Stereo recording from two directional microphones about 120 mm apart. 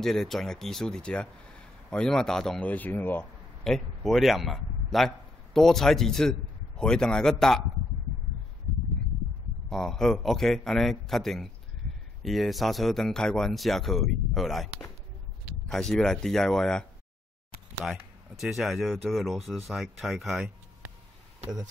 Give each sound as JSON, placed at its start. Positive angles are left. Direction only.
{"t": 0.0, "sound": "speech", "side_deg": 5}
{"t": 3.6, "sound": "a man's voice", "side_deg": 5}
{"t": 9.7, "sound": "speech", "side_deg": 5}
{"t": 15.7, "sound": "speech", "side_deg": 5}
{"t": 17.8, "sound": "speech", "side_deg": -5}